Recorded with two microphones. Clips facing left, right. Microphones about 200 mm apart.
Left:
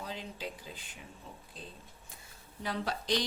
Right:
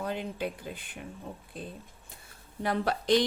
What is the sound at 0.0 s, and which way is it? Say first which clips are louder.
Speech: right 8 dB; 60° right (ahead or behind).